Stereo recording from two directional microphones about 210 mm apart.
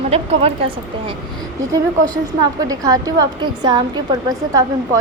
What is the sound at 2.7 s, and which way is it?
A woman's voice, 15° right (ahead or behind).